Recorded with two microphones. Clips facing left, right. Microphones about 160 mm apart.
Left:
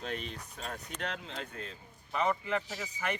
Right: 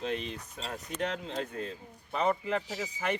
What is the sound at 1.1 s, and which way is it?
Speech, 40° right (ahead or behind).